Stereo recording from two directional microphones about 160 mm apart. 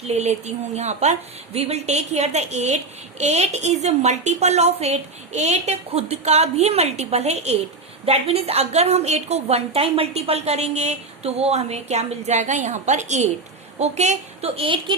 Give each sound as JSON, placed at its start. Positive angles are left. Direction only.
{"t": 0.0, "sound": "a woman's voice", "side_deg": -45}